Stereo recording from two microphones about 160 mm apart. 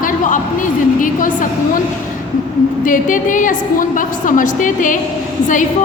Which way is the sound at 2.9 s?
55° left (ahead or behind).